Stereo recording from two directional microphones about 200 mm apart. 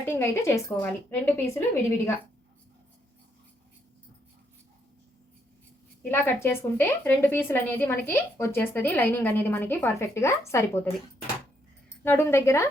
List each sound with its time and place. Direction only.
0.0 s a woman's voice: 10° left (ahead or behind)
6.0 s a woman's voice: 10° left (ahead or behind)
12.0 s a woman's voice: 10° left (ahead or behind)